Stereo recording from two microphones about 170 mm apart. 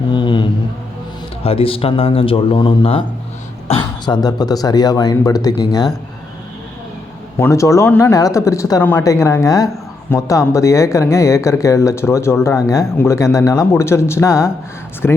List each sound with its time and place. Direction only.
0.1 s mantra: 25° left (ahead or behind)
1.5 s a man's voice: 35° left (ahead or behind)
7.3 s speech: 15° left (ahead or behind)